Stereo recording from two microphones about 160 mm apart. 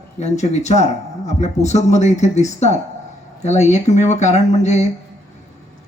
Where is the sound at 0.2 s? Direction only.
45° left (ahead or behind).